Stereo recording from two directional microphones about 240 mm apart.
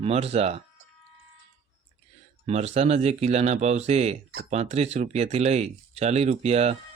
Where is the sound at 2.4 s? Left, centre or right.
Right.